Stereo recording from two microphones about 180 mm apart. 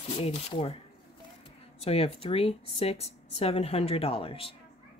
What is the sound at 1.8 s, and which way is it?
A woman's voice, 35° left (ahead or behind).